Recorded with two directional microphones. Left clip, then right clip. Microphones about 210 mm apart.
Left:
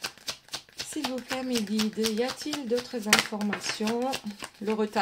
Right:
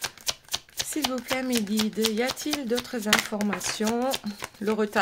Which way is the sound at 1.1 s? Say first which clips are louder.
Right 3 dB; 25° right (ahead or behind).